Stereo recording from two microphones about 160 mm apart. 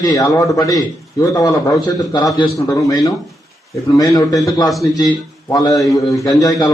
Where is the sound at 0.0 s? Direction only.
20° left (ahead or behind).